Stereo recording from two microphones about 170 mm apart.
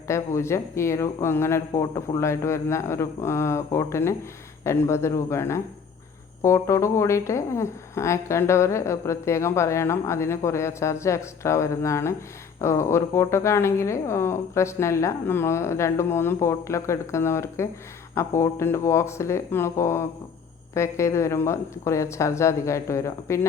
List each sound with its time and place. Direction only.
0.1 s speech: 15° left (ahead or behind)